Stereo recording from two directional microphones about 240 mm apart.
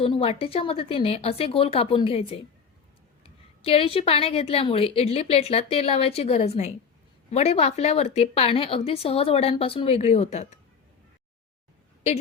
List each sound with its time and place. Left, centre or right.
0.0 s speech: left
3.6 s speech: left